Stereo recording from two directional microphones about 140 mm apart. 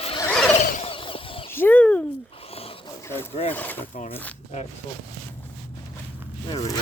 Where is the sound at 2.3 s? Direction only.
45° left (ahead or behind).